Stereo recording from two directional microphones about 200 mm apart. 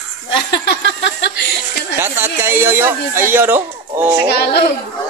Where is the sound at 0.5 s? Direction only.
65° left (ahead or behind).